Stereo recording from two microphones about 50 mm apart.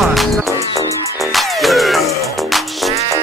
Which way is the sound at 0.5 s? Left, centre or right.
Right.